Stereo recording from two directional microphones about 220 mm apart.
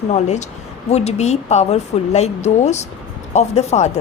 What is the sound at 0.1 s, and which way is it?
A woman's voice, 30° left (ahead or behind).